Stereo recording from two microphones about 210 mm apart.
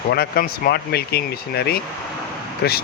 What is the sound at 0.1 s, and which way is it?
Speech, 45° left (ahead or behind).